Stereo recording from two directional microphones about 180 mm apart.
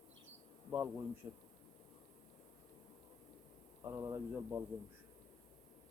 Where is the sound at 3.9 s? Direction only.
15° right (ahead or behind).